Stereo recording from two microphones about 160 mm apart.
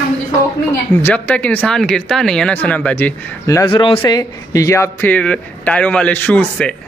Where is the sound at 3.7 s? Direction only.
30° left (ahead or behind).